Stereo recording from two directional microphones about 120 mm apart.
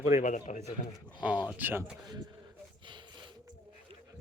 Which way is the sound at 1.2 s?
10° right (ahead or behind).